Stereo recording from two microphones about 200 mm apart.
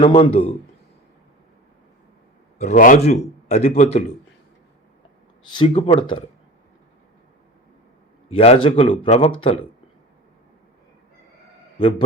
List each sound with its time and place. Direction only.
0.0 s a man's voice: 30° left (ahead or behind)
2.6 s a man's voice: 40° left (ahead or behind)
3.7 s a man's voice: 50° left (ahead or behind)
5.5 s speech: 25° left (ahead or behind)
8.4 s speech: 30° left (ahead or behind)
11.8 s speech: 25° left (ahead or behind)